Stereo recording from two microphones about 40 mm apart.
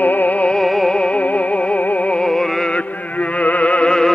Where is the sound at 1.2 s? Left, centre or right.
Left.